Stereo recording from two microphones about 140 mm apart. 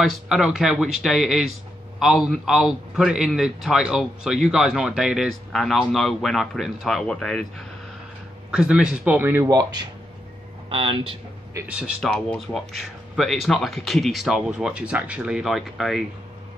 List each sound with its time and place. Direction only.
0.0 s a man's voice: 5° right (ahead or behind)
9.5 s speech: 25° right (ahead or behind)
10.7 s speech: 40° right (ahead or behind)
11.5 s speech: 10° right (ahead or behind)
12.0 s a man's voice: 5° left (ahead or behind)